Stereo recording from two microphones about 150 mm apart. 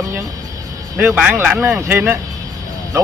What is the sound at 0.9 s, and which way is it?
Speech, 5° right (ahead or behind).